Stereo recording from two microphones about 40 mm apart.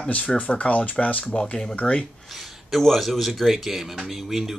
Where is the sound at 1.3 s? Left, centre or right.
Left.